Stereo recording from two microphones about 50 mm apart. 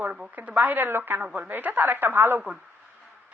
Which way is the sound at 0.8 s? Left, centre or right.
Right.